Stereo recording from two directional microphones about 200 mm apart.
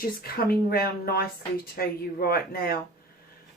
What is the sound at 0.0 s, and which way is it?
Speech, 50° left (ahead or behind).